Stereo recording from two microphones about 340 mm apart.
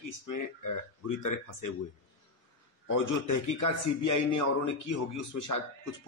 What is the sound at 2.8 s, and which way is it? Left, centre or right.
A man's voice, left.